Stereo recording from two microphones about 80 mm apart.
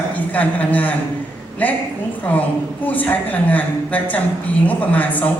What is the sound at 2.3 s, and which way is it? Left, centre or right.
A woman's voice, centre.